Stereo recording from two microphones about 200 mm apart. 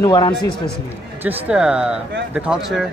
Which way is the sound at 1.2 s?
5° right (ahead or behind).